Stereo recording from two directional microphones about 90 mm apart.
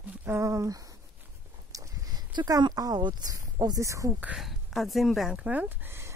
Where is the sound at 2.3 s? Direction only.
50° right (ahead or behind).